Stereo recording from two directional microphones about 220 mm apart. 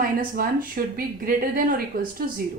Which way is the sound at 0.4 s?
40° right (ahead or behind).